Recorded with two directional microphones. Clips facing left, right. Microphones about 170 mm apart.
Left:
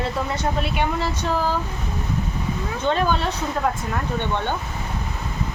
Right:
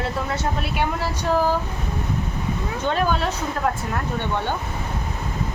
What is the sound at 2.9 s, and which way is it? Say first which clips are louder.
Speech: left 1 dB; 5° right (ahead or behind).